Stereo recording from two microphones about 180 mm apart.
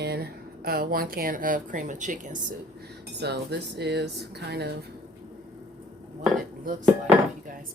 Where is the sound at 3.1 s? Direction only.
70° right (ahead or behind).